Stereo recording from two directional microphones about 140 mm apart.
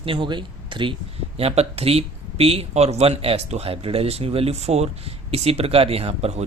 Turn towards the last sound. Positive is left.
turn(degrees=-50)  # may be behind; listen again after turning